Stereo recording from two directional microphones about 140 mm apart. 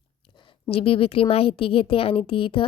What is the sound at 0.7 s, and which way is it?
A woman's voice, 40° left (ahead or behind).